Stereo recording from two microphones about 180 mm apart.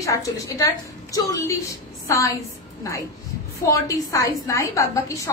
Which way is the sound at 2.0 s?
15° left (ahead or behind).